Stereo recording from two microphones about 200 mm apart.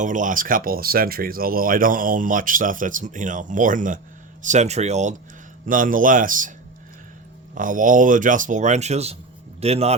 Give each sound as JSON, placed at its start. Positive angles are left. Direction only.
{"t": 0.0, "sound": "speech", "side_deg": -40}
{"t": 7.5, "sound": "a man's voice", "side_deg": -40}